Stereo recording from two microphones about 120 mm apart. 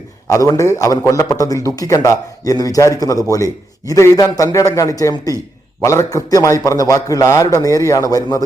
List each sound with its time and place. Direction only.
0.3 s a man's voice: 30° left (ahead or behind)